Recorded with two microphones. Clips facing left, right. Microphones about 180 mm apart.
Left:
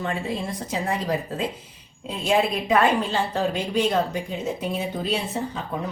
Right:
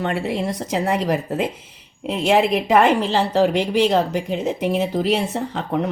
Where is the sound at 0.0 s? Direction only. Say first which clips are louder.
Right 5 dB; 75° right (ahead or behind).